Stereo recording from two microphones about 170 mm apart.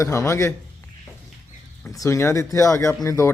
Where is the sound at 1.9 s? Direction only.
20° left (ahead or behind).